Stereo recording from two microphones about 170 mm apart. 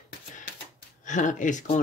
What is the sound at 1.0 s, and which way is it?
Speech, 45° left (ahead or behind).